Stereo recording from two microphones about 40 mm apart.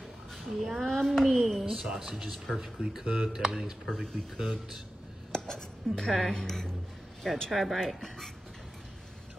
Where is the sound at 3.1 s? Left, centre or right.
Centre.